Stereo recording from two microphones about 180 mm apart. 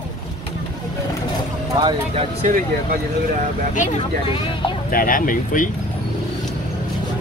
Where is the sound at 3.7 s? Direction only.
45° left (ahead or behind).